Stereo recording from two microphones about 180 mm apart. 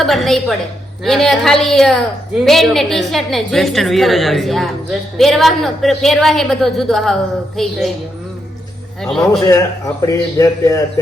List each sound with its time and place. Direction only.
0.0 s a woman's voice: centre (ahead or behind)
9.0 s a man's voice: centre (ahead or behind)
9.5 s speech: 20° left (ahead or behind)